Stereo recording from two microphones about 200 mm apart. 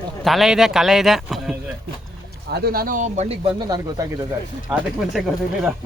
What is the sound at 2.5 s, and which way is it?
Speech, 50° right (ahead or behind).